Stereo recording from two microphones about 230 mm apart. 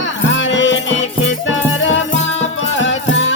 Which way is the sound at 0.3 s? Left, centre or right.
Left.